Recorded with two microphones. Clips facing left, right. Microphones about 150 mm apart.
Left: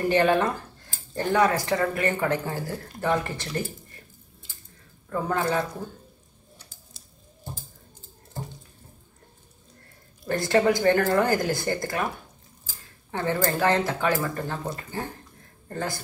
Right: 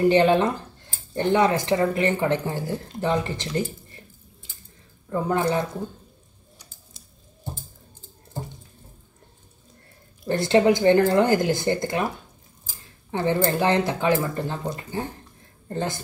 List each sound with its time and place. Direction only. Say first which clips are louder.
0.1 s speech: right 3 dB; 20° right (ahead or behind)
5.1 s speech: right 3 dB; 20° right (ahead or behind)
10.2 s speech: right 3 dB; 20° right (ahead or behind)